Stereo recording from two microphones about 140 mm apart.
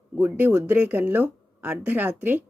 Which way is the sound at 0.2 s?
15° right (ahead or behind).